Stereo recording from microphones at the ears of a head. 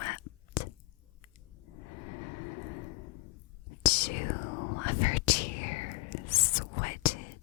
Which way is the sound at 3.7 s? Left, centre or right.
Left.